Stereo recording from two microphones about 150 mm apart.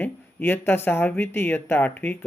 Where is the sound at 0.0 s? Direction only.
15° left (ahead or behind).